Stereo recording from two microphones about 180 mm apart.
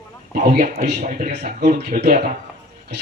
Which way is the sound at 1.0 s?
45° right (ahead or behind).